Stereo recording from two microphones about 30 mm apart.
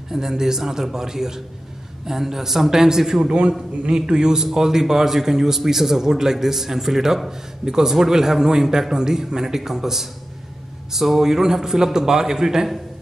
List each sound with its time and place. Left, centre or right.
0.1 s a man's voice: centre
3.3 s a man's voice: right